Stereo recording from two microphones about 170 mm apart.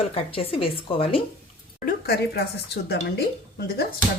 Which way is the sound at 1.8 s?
65° left (ahead or behind).